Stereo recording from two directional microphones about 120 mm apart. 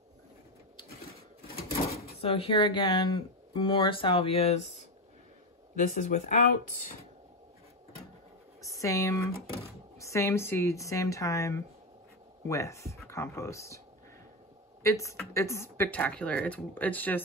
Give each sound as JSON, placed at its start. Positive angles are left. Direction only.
{"t": 2.2, "sound": "speech", "side_deg": 50}
{"t": 5.8, "sound": "speech", "side_deg": 90}
{"t": 8.6, "sound": "speech", "side_deg": 25}
{"t": 14.8, "sound": "a woman's voice", "side_deg": 25}
{"t": 15.9, "sound": "speech", "side_deg": 10}